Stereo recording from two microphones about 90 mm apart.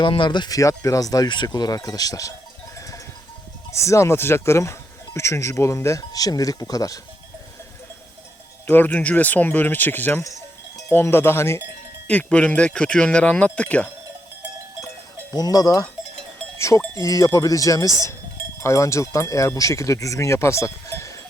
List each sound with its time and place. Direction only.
0.0 s speech: 65° left (ahead or behind); by 1.3 s 45° left (ahead or behind)
1.3 s speech: 55° left (ahead or behind)
2.7 s sheep: 35° left (ahead or behind)
3.7 s speech: 35° left (ahead or behind)
8.6 s speech: 20° left (ahead or behind)
12.0 s speech: 15° left (ahead or behind)
15.4 s speech: 45° left (ahead or behind)
16.6 s cowbell: 35° left (ahead or behind)
17.0 s speech: 40° left (ahead or behind)